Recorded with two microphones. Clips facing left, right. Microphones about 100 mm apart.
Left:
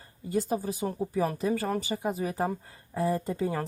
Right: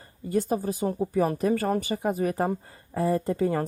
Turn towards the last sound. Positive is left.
turn(degrees=-55)  # may be behind; listen again after turning